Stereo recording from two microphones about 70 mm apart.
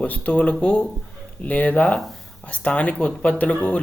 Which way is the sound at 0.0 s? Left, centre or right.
Centre.